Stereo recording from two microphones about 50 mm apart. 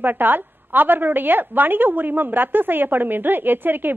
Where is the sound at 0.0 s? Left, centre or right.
Right.